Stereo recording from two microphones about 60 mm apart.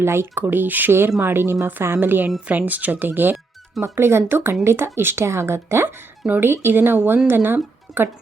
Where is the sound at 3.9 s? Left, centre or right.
Right.